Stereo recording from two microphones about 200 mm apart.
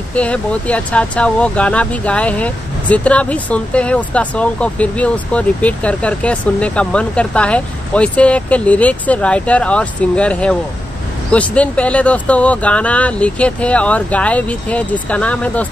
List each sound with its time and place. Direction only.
0.1 s speech: 5° left (ahead or behind)